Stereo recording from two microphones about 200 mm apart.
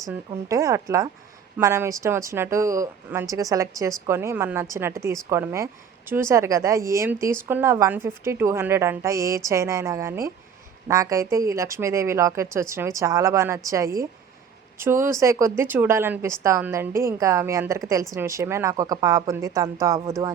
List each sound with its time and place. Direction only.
0.0 s speech: 15° right (ahead or behind)